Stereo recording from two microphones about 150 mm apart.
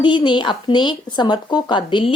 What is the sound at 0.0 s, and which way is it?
A woman's voice, 30° left (ahead or behind).